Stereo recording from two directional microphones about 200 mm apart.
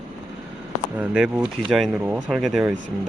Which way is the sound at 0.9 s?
5° right (ahead or behind).